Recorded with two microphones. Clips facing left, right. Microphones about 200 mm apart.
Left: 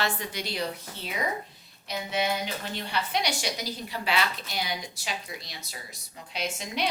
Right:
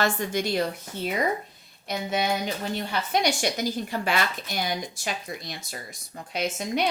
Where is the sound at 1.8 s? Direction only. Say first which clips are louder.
Right 2 dB; 45° right (ahead or behind).